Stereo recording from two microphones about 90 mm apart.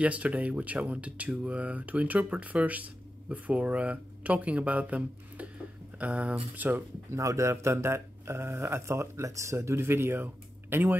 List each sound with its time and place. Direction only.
0.0 s speech: 15° right (ahead or behind)
7.2 s speech: 35° right (ahead or behind)